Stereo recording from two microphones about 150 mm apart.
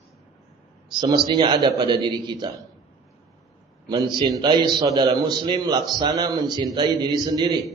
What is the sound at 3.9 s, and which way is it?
A man's voice, 30° right (ahead or behind).